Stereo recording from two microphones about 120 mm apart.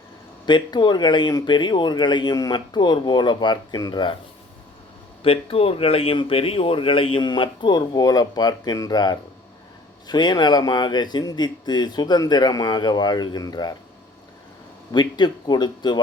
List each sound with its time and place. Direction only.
0.4 s speech: 40° left (ahead or behind)
5.2 s speech: 50° left (ahead or behind); by 13.7 s 35° left (ahead or behind)
14.9 s speech: 35° left (ahead or behind)